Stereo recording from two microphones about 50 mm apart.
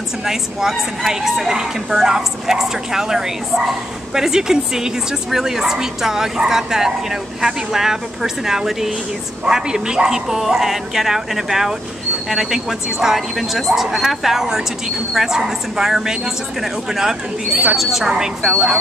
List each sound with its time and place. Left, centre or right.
0.2 s a woman's voice: centre